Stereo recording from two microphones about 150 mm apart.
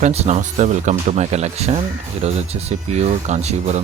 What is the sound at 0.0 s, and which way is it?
Speech, 45° right (ahead or behind).